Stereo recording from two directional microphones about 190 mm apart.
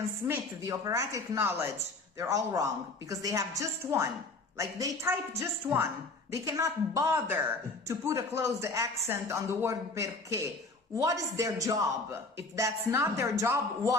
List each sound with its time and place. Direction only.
0.3 s speech: 20° right (ahead or behind)